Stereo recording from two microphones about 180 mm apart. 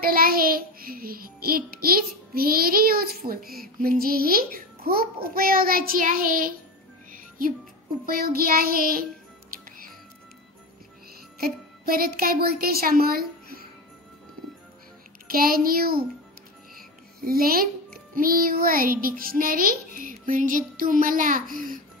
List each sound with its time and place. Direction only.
0.0 s child singing: 55° right (ahead or behind)
7.1 s music: 50° right (ahead or behind)
8.0 s child singing: 55° right (ahead or behind)
11.3 s speech: 55° right (ahead or behind)
15.2 s child singing: 55° right (ahead or behind)
17.2 s child singing: 55° right (ahead or behind)
18.1 s a child's voice: 55° right (ahead or behind)